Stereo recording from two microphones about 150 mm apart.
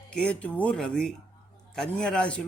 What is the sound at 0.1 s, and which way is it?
A man's voice, 5° left (ahead or behind).